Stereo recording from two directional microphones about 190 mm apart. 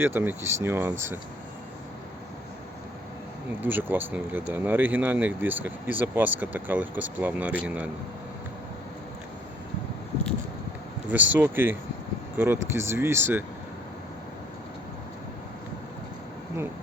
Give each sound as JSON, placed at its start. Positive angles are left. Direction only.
{"t": 0.0, "sound": "speech", "side_deg": -10}
{"t": 3.6, "sound": "speech", "side_deg": -10}
{"t": 11.1, "sound": "speech", "side_deg": -10}